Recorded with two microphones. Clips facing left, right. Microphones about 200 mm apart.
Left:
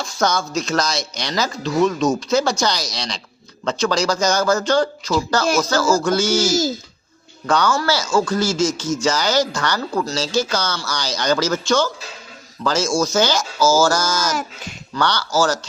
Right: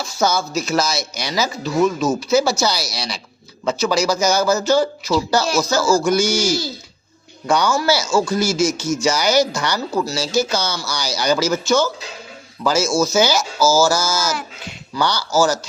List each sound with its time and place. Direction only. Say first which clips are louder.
0.0 s speech: right 1 dB; 5° right (ahead or behind)
6.5 s speech: left 3 dB; 45° left (ahead or behind)
7.4 s speech: right 1 dB; 10° right (ahead or behind)